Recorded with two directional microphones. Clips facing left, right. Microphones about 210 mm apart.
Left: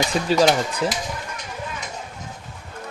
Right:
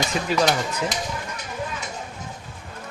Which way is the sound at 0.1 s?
35° left (ahead or behind).